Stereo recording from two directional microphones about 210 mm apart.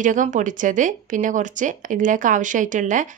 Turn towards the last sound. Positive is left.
turn(degrees=-35)  # may be behind; listen again after turning